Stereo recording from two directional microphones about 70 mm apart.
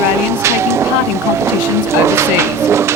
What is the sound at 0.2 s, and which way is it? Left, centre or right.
Music, right.